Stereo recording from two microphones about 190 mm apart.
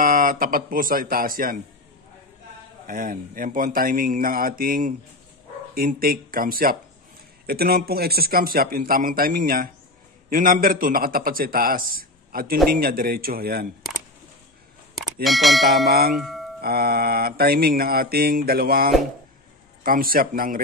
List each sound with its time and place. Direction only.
0.0 s speech: 45° right (ahead or behind)
2.9 s mantra: 45° right (ahead or behind)
15.2 s speech: centre (ahead or behind)
15.9 s mantra: 55° right (ahead or behind)
16.2 s speech: centre (ahead or behind)
16.6 s mantra: 55° right (ahead or behind)